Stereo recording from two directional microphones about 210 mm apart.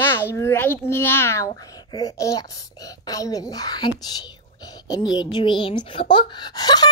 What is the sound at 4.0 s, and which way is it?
Whispering, 20° left (ahead or behind).